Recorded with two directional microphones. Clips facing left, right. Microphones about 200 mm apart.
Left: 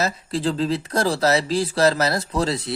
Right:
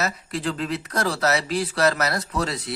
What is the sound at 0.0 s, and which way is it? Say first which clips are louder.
Speech: left 4 dB; 30° left (ahead or behind).